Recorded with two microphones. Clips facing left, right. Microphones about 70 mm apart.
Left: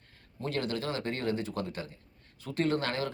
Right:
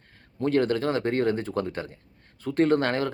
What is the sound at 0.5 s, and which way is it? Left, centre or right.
Speech, right.